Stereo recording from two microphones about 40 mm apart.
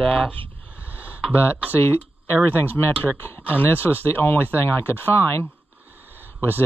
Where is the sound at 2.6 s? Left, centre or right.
Left.